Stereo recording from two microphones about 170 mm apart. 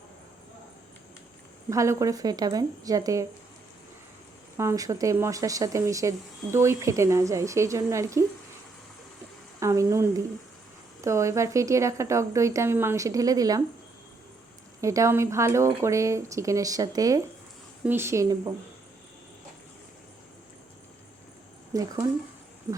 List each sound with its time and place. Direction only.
1.7 s a woman's voice: 20° right (ahead or behind)
4.5 s speech: 20° right (ahead or behind)
9.6 s speech: 15° right (ahead or behind)
14.8 s speech: 20° right (ahead or behind)
21.7 s a woman's voice: 20° right (ahead or behind)